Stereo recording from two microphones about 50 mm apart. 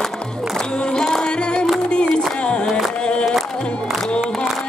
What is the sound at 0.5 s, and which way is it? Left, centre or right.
Music, centre.